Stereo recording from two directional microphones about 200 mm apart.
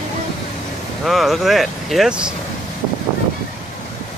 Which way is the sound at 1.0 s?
Centre (ahead or behind).